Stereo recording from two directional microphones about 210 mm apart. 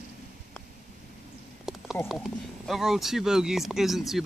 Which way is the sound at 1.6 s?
Centre (ahead or behind).